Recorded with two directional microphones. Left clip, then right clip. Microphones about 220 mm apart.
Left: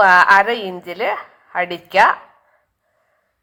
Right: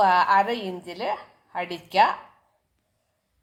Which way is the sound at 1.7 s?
15° left (ahead or behind).